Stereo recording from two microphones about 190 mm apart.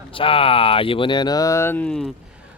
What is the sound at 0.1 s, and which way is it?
Speech, 30° left (ahead or behind).